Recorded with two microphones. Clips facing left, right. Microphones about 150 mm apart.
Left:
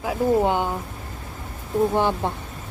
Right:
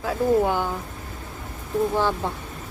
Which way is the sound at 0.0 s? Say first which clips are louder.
Even; 20° left (ahead or behind).